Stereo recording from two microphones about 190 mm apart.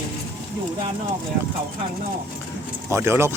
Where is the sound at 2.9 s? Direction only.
15° right (ahead or behind).